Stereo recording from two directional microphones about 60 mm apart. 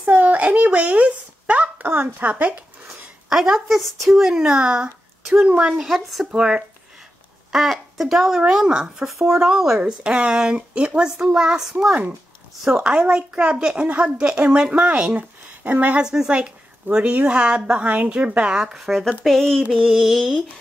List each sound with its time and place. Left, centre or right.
0.0 s a sound: right
1.9 s a woman's voice: right
2.9 s a sound: centre
4.1 s speech: centre
5.8 s a woman's voice: centre; by 16.0 s right
16.0 s a woman's voice: centre
18.6 s a woman's voice: centre